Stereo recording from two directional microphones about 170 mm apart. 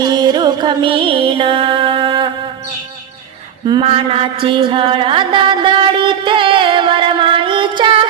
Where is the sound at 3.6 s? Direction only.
30° right (ahead or behind).